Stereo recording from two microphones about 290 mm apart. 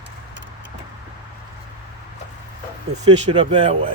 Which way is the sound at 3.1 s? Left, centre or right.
Centre.